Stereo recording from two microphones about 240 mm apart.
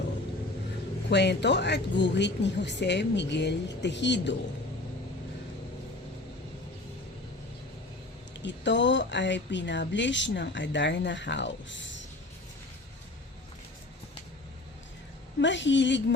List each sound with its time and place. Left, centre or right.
1.1 s speech: left
8.4 s speech: left
15.4 s speech: left